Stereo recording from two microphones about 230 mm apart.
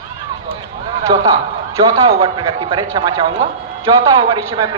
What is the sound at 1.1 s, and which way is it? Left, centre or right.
A man's voice, centre.